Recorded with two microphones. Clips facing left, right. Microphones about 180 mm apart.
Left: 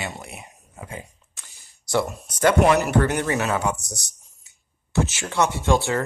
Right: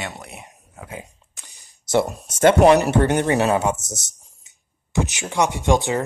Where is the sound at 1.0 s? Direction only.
15° right (ahead or behind).